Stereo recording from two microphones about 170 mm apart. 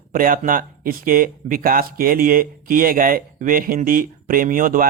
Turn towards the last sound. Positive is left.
turn(degrees=-55)  # may be behind; listen again after turning